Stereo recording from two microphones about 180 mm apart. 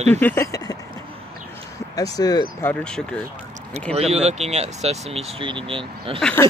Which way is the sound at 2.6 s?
5° left (ahead or behind).